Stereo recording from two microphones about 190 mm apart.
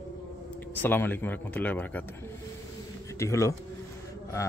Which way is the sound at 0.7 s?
10° left (ahead or behind).